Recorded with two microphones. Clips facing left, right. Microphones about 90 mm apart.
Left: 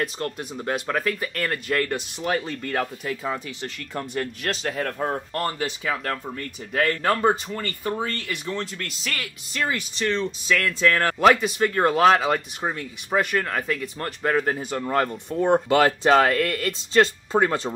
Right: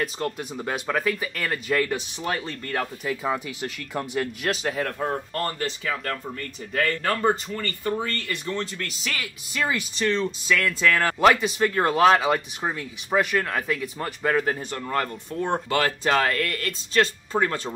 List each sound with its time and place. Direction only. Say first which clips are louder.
0.0 s speech: even; centre (ahead or behind)
4.9 s speech: left 1 dB; 5° left (ahead or behind)